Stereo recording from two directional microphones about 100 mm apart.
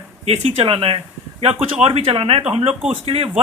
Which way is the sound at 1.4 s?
90° right.